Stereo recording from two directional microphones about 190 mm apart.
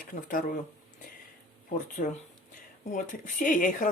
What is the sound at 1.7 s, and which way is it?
Speech, 40° left (ahead or behind).